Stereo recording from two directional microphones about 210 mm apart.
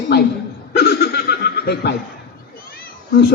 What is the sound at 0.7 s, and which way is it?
Laughter, 50° left (ahead or behind).